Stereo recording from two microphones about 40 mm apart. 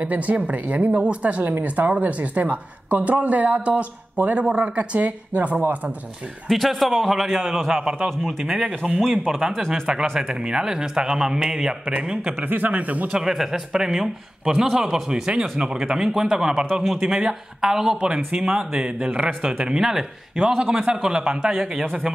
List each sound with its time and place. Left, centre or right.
0.0 s speech: right
6.5 s a man's voice: centre
8.6 s a man's voice: right
10.4 s speech: centre
12.3 s speech: right
13.1 s a man's voice: centre
18.9 s a man's voice: right
19.6 s speech: centre
20.3 s a man's voice: right